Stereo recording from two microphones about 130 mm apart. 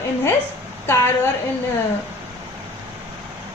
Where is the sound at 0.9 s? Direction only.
20° left (ahead or behind).